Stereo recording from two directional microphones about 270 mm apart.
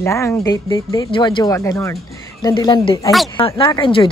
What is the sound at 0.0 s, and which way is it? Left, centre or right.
A woman's voice, centre.